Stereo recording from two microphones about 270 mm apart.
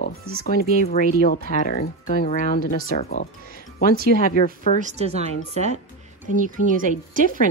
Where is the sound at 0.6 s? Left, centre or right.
Left.